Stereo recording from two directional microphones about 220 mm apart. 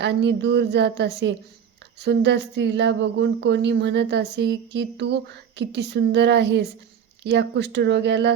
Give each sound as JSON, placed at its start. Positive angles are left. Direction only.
{"t": 0.0, "sound": "speech", "side_deg": -50}